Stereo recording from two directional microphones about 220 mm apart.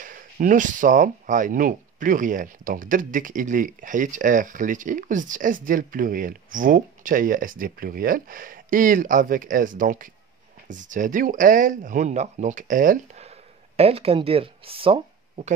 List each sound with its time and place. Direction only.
0.0 s speech: 40° right (ahead or behind)